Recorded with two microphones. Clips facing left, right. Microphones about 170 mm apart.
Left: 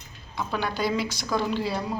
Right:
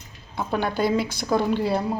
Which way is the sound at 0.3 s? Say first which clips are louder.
Right 4 dB; 50° right (ahead or behind).